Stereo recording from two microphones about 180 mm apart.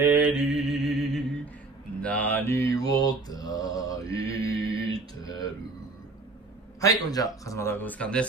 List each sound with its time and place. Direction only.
0.0 s mantra: 10° right (ahead or behind); by 4.8 s 20° left (ahead or behind)
5.2 s a sound: 20° left (ahead or behind)
6.8 s a man's voice: 20° left (ahead or behind)